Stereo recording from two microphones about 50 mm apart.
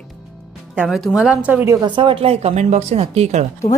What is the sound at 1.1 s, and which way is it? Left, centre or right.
Speech, centre.